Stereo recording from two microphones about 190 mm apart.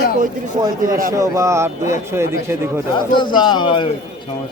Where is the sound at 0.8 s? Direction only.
45° right (ahead or behind).